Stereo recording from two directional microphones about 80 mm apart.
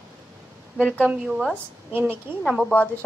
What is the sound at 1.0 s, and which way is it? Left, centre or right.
Speech, centre.